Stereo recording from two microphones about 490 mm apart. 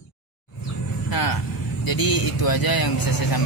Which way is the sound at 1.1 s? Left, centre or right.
Left.